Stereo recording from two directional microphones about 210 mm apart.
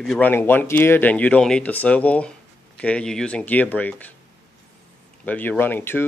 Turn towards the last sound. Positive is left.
turn(degrees=10)  # may be behind; listen again after turning